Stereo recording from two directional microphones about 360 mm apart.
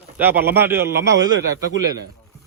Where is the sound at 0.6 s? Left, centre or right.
Centre.